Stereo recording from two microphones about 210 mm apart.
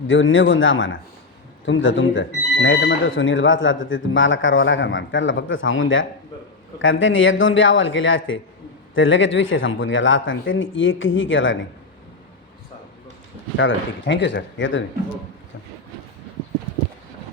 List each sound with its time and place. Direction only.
0.1 s speech: 65° left (ahead or behind)
13.6 s speech: 60° left (ahead or behind)